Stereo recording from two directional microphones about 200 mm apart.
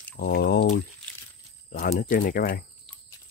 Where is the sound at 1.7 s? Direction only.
45° left (ahead or behind).